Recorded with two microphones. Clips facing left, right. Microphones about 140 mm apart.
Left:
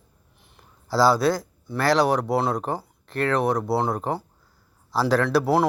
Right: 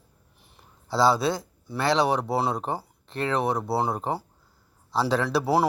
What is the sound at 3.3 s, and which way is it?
Speech, centre (ahead or behind).